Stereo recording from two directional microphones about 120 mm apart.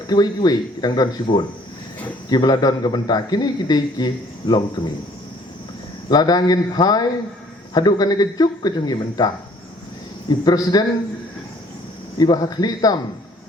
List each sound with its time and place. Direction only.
0.1 s a man's voice: 35° left (ahead or behind)
6.1 s a man's voice: 35° left (ahead or behind)
12.1 s a man's voice: 35° left (ahead or behind)